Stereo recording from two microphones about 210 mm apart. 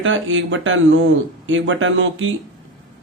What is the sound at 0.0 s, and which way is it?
A man's voice, 65° right (ahead or behind).